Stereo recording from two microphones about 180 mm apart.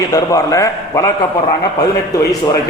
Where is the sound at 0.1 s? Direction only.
20° left (ahead or behind).